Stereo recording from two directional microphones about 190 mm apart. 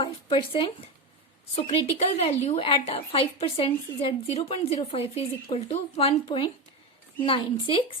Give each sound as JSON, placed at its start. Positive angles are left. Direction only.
{"t": 0.0, "sound": "a woman's voice", "side_deg": 25}